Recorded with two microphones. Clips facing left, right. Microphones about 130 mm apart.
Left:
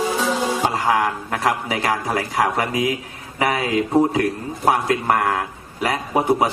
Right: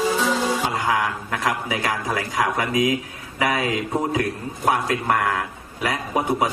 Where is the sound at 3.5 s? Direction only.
30° left (ahead or behind).